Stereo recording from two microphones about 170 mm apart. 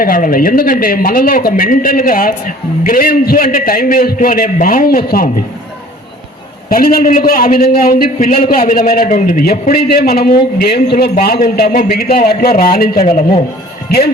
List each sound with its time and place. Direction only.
0.0 s a man's voice: 55° left (ahead or behind)
6.7 s a man's voice: 60° left (ahead or behind)
11.3 s a man's voice: 55° left (ahead or behind)
13.1 s a man's voice: 35° left (ahead or behind)